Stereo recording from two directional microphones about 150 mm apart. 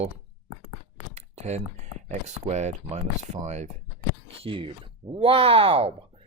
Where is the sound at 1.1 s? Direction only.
50° right (ahead or behind).